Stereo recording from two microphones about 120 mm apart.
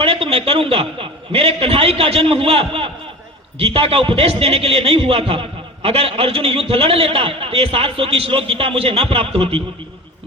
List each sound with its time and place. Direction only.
0.0 s a man's voice: 50° right (ahead or behind)